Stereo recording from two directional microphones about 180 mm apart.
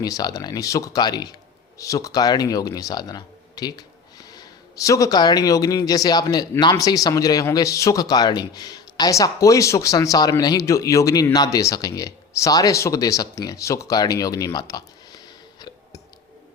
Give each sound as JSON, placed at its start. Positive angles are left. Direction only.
{"t": 0.0, "sound": "speech", "side_deg": 20}